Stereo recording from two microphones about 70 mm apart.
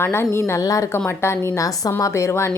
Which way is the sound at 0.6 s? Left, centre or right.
Left.